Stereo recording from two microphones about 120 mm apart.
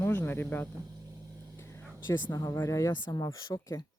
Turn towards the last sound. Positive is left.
turn(degrees=30)  # may be behind; listen again after turning